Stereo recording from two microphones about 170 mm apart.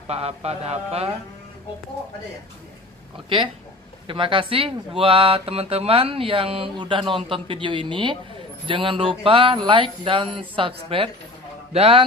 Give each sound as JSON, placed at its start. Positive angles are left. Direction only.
{"t": 0.1, "sound": "speech", "side_deg": -35}
{"t": 4.1, "sound": "speech", "side_deg": -30}